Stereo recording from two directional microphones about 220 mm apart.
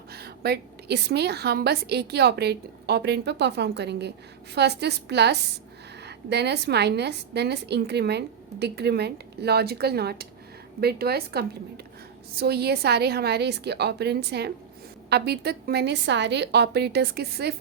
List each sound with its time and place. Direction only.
0.1 s a woman's voice: 45° right (ahead or behind)